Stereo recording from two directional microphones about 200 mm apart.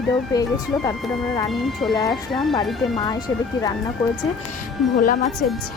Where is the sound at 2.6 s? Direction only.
Centre (ahead or behind).